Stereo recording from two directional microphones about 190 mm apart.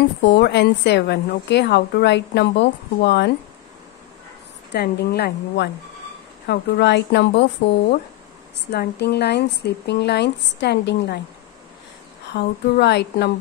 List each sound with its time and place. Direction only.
0.3 s a woman's voice: 65° left (ahead or behind)
4.7 s a woman's voice: 55° left (ahead or behind)
8.7 s a woman's voice: 60° left (ahead or behind)
12.4 s a woman's voice: 60° left (ahead or behind)